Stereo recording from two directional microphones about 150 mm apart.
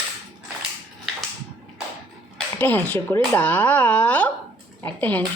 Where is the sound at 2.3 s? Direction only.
10° left (ahead or behind).